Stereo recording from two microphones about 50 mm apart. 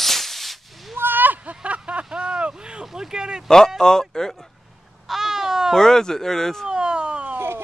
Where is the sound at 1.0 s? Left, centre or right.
Right.